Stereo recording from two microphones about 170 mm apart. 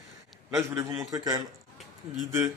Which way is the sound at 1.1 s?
20° right (ahead or behind).